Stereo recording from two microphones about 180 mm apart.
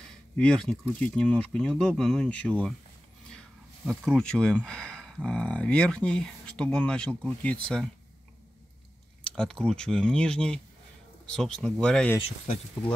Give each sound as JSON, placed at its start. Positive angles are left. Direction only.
{"t": 0.4, "sound": "speech", "side_deg": 5}
{"t": 3.3, "sound": "a sound", "side_deg": 5}
{"t": 4.6, "sound": "speech", "side_deg": 5}
{"t": 9.2, "sound": "speech", "side_deg": 5}
{"t": 12.2, "sound": "speech", "side_deg": 35}